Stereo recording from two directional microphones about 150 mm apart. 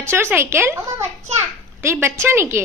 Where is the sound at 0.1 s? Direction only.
15° right (ahead or behind).